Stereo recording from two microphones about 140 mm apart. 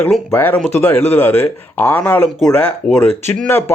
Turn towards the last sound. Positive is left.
turn(degrees=15)  # may be behind; listen again after turning